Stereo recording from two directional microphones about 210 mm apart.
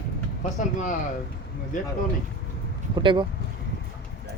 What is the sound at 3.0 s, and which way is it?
Speech, 20° right (ahead or behind).